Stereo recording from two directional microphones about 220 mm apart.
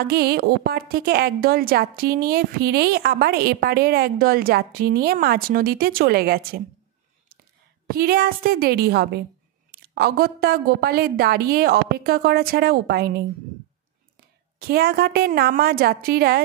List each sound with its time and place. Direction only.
0.0 s a woman's voice: 45° right (ahead or behind)
7.8 s a woman's voice: 45° right (ahead or behind)
14.6 s a woman's voice: 45° right (ahead or behind)